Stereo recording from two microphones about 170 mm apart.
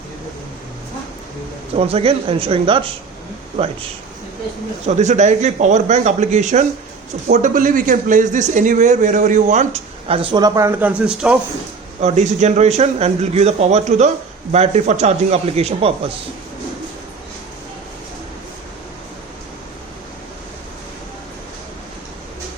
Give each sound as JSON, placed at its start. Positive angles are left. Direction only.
{"t": 1.7, "sound": "a man's voice", "side_deg": -35}
{"t": 4.9, "sound": "a man's voice", "side_deg": -45}
{"t": 10.1, "sound": "speech", "side_deg": -30}
{"t": 11.9, "sound": "a man's voice", "side_deg": -45}